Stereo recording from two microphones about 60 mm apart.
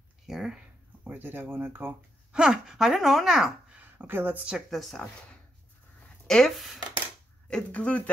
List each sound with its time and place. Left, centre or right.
0.3 s speech: centre
1.0 s speech: right
2.3 s speech: centre
3.7 s a sound: right
4.6 s speech: centre
6.2 s speech: centre